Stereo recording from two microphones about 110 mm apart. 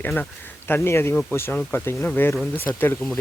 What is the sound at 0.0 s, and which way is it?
Speech, 15° left (ahead or behind).